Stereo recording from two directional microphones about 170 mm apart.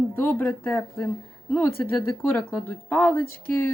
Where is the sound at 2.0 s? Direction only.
15° left (ahead or behind).